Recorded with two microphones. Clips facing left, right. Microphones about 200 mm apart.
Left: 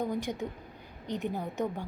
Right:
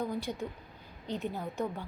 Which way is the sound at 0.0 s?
15° left (ahead or behind).